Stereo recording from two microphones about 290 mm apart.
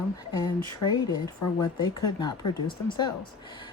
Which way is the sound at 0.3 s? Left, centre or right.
Centre.